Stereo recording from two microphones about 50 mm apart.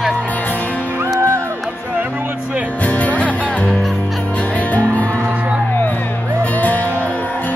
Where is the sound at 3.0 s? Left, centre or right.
Left.